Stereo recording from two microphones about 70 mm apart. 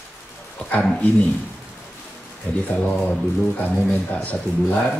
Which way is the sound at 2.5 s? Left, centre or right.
Centre.